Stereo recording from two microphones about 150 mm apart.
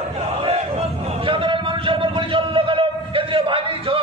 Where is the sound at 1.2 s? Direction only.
35° right (ahead or behind).